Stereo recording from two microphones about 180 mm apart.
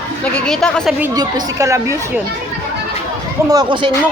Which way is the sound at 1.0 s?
20° right (ahead or behind).